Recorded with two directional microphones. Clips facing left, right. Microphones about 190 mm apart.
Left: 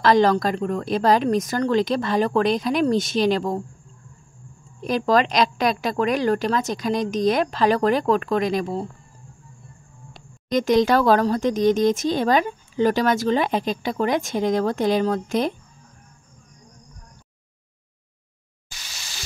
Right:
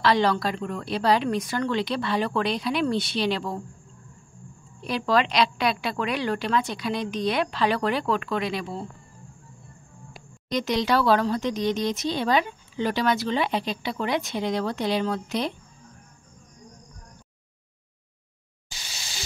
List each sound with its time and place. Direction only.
0.0 s speech: 45° left (ahead or behind)
4.8 s speech: 45° left (ahead or behind)
10.5 s speech: 45° left (ahead or behind)